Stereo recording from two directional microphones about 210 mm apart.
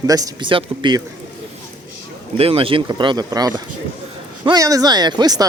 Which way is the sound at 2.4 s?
25° right (ahead or behind).